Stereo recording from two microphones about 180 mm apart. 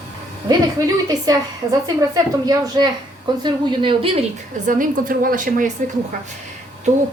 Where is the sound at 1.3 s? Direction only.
20° right (ahead or behind).